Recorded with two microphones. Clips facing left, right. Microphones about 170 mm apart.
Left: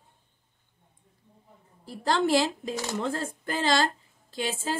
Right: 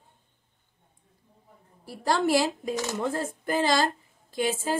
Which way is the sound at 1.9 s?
10° right (ahead or behind).